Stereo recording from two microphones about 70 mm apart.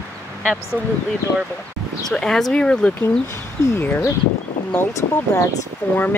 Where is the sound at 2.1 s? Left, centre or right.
Centre.